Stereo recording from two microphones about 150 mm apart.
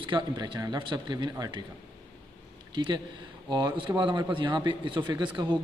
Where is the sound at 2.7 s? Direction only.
30° right (ahead or behind).